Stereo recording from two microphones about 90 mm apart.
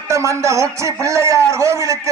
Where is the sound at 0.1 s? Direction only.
35° right (ahead or behind).